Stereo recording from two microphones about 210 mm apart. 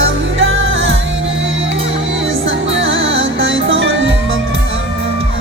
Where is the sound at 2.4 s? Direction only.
65° right (ahead or behind).